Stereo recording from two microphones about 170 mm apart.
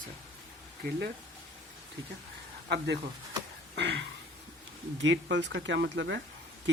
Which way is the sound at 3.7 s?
90° right.